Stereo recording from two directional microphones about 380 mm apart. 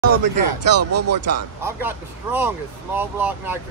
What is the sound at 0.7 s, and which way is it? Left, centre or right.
Speech, right.